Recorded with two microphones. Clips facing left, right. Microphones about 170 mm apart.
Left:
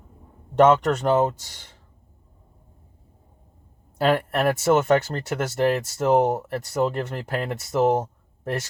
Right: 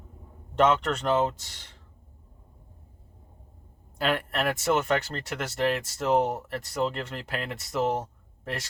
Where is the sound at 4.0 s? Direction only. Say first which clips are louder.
Left 6 dB; 45° left (ahead or behind).